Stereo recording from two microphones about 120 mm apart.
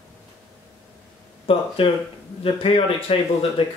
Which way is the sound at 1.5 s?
50° left (ahead or behind).